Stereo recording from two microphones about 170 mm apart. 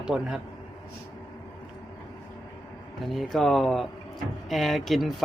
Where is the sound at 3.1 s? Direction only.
Centre (ahead or behind).